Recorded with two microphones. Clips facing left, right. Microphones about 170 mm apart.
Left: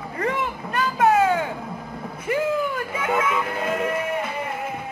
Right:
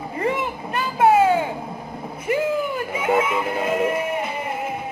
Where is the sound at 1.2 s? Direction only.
20° right (ahead or behind).